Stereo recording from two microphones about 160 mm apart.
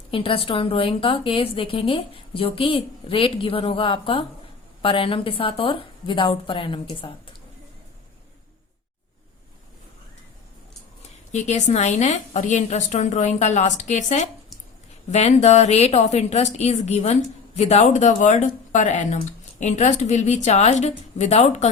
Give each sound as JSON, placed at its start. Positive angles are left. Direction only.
{"t": 0.1, "sound": "speech", "side_deg": 35}
{"t": 11.3, "sound": "speech", "side_deg": 45}